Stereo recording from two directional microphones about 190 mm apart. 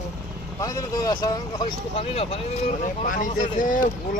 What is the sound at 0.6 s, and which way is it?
Speech, 20° left (ahead or behind).